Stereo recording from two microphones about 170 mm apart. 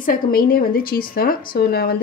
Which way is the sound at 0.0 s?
60° left (ahead or behind).